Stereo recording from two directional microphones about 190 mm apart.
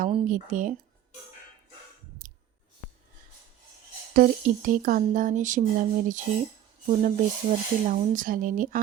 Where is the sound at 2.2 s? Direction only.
45° right (ahead or behind).